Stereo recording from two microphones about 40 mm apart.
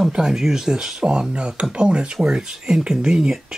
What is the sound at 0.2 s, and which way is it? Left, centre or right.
Speech, centre.